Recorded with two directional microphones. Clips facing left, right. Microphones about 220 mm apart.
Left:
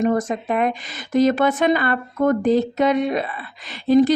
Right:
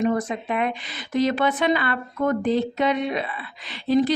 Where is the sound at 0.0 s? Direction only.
45° left (ahead or behind).